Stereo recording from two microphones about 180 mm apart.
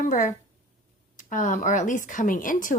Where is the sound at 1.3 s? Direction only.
45° left (ahead or behind).